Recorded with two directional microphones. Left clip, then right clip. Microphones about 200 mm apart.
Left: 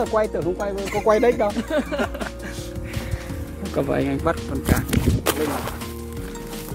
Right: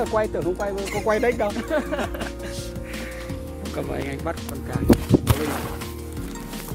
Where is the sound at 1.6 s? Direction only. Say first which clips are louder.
Left 1 dB; 25° right (ahead or behind).